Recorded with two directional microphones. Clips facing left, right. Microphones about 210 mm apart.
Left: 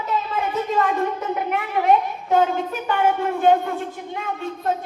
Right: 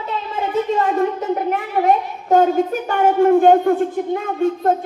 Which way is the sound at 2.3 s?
45° right (ahead or behind).